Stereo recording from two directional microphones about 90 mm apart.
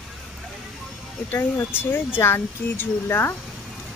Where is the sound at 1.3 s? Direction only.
25° left (ahead or behind).